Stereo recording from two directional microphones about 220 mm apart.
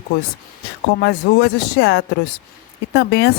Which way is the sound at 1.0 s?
50° left (ahead or behind).